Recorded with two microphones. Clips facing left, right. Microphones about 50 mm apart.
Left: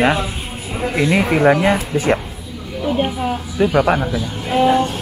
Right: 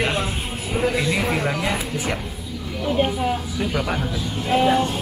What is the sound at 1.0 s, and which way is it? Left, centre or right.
Speech, left.